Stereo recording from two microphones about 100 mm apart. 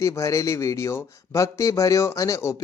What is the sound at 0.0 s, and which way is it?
Speech, 30° left (ahead or behind).